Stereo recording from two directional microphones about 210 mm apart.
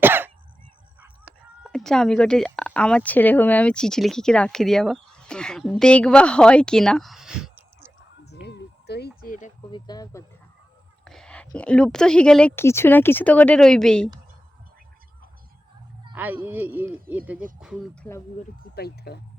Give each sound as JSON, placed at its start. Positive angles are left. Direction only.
{"t": 0.0, "sound": "cough", "side_deg": -10}
{"t": 1.6, "sound": "speech", "side_deg": 0}
{"t": 8.3, "sound": "a sound", "side_deg": 50}
{"t": 9.2, "sound": "a sound", "side_deg": 40}
{"t": 9.7, "sound": "speech", "side_deg": 20}
{"t": 11.0, "sound": "whispering", "side_deg": 0}
{"t": 11.5, "sound": "speech", "side_deg": 5}
{"t": 16.1, "sound": "speech", "side_deg": -10}
{"t": 18.7, "sound": "speech", "side_deg": 50}